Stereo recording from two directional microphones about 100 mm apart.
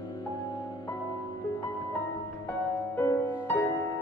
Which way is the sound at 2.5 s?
20° left (ahead or behind).